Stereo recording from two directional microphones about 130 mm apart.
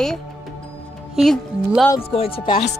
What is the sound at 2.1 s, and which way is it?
Speech, 45° left (ahead or behind).